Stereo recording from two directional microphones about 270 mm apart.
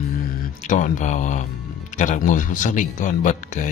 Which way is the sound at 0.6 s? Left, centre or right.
Left.